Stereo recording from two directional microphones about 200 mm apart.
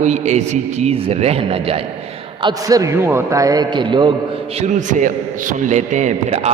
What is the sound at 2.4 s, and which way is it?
A man's voice, 20° right (ahead or behind).